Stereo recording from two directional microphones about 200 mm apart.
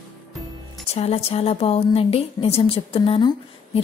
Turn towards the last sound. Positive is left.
turn(degrees=25)  # may be behind; listen again after turning